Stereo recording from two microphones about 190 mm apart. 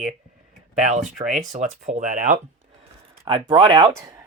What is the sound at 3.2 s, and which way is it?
Speech, 30° right (ahead or behind).